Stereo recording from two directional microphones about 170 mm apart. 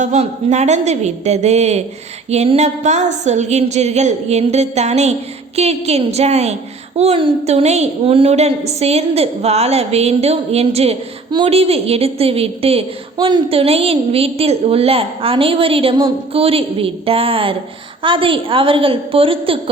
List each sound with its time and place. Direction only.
0.0 s a woman's voice: 40° right (ahead or behind)